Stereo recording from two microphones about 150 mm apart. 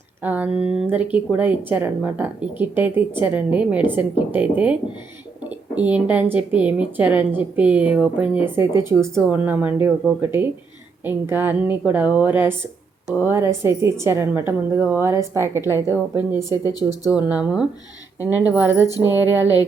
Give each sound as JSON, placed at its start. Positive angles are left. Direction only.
{"t": 0.2, "sound": "a woman's voice", "side_deg": -10}
{"t": 0.5, "sound": "speech", "side_deg": 45}
{"t": 0.8, "sound": "a woman's voice", "side_deg": -10}
{"t": 16.5, "sound": "speech", "side_deg": 25}
{"t": 17.1, "sound": "a woman's voice", "side_deg": -10}
{"t": 18.9, "sound": "speech", "side_deg": 20}